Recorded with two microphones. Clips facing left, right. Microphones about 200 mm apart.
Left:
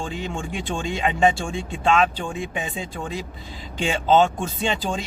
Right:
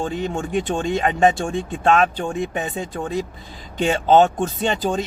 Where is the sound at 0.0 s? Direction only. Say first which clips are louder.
Right 5 dB; 50° right (ahead or behind).